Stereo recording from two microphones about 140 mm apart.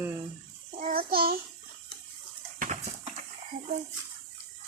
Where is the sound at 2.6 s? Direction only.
60° right (ahead or behind).